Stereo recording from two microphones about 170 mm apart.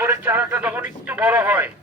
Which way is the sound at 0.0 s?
10° right (ahead or behind).